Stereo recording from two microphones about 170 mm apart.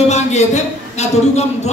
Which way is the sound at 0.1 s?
40° left (ahead or behind).